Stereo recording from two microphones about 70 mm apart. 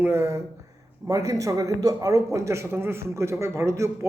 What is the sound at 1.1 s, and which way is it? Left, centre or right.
A man's voice, right.